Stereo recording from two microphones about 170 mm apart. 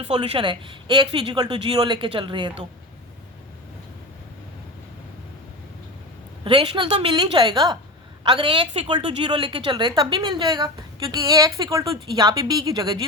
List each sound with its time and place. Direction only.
0.1 s a woman's voice: 30° right (ahead or behind)
6.4 s a woman's voice: 30° right (ahead or behind)